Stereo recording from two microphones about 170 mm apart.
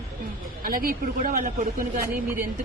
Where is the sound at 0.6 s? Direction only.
55° right (ahead or behind).